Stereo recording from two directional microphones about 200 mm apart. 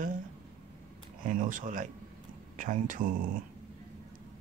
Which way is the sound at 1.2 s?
40° right (ahead or behind).